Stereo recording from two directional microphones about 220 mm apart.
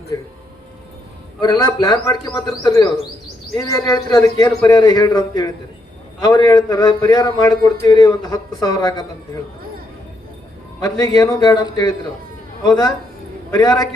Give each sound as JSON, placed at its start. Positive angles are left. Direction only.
{"t": 1.4, "sound": "a man's voice", "side_deg": 20}
{"t": 10.8, "sound": "a man's voice", "side_deg": 15}